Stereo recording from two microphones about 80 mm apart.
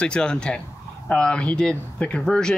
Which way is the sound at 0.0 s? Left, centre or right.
Centre.